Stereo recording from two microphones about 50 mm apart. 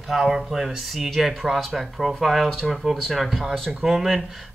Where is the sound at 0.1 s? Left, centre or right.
Centre.